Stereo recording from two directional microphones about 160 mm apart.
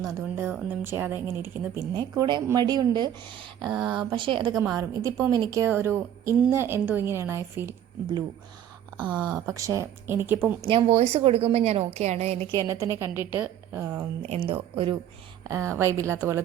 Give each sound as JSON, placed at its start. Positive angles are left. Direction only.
{"t": 0.1, "sound": "a woman's voice", "side_deg": -15}
{"t": 2.0, "sound": "a woman's voice", "side_deg": -25}
{"t": 9.0, "sound": "a woman's voice", "side_deg": -25}
{"t": 10.7, "sound": "a woman's voice", "side_deg": -40}
{"t": 12.8, "sound": "a woman's voice", "side_deg": -15}
{"t": 14.2, "sound": "a woman's voice", "side_deg": -35}
{"t": 15.4, "sound": "a woman's voice", "side_deg": -20}